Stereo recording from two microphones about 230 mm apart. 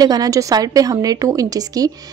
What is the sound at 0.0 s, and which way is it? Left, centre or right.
A woman's voice, centre.